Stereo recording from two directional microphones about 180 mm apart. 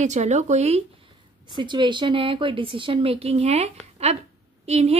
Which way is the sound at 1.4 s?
25° right (ahead or behind).